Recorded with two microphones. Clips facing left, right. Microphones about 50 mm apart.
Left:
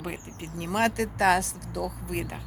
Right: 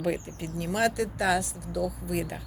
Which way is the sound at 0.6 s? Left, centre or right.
Left.